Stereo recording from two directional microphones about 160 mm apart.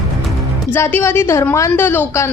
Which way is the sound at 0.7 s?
15° left (ahead or behind).